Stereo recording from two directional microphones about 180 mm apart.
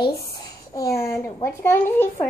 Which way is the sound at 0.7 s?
15° left (ahead or behind).